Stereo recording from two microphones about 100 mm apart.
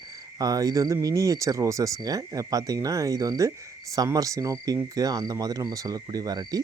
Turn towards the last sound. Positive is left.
turn(degrees=-40)  # may be behind; listen again after turning